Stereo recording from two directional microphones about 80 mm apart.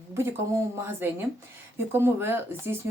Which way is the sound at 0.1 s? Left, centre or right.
Right.